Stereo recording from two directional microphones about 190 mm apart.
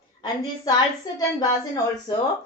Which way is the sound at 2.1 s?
20° left (ahead or behind).